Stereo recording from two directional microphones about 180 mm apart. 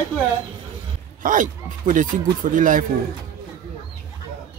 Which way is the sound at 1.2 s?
45° right (ahead or behind).